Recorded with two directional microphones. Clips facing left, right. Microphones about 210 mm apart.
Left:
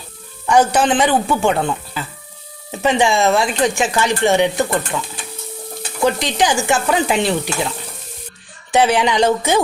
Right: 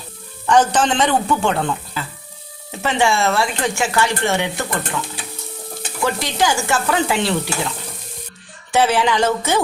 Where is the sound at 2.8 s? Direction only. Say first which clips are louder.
Left 3 dB; 15° left (ahead or behind).